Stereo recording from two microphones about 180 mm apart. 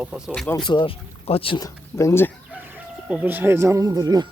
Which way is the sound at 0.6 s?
25° left (ahead or behind).